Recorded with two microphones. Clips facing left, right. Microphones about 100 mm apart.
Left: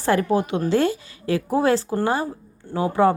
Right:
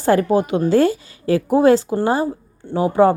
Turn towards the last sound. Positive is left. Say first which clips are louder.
# right 4 dB
turn(degrees=-25)  # may be behind; listen again after turning